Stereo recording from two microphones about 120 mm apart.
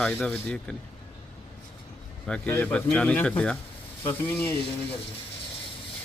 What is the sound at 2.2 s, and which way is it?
Speech, 10° left (ahead or behind).